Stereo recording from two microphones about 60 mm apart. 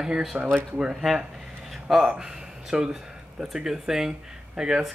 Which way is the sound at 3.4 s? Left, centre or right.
Centre.